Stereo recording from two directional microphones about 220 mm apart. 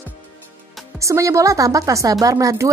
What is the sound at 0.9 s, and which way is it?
Speech, 15° right (ahead or behind).